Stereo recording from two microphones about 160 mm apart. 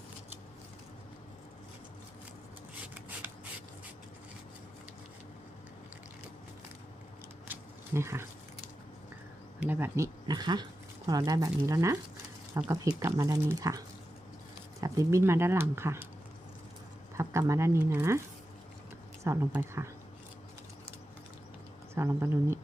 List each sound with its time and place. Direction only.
7.4 s a sound: 15° right (ahead or behind)
9.6 s speech: 10° right (ahead or behind)
17.2 s speech: 20° right (ahead or behind)
19.2 s speech: 15° right (ahead or behind)
21.9 s speech: 15° right (ahead or behind)